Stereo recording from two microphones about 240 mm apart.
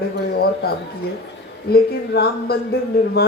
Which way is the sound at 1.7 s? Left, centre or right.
Left.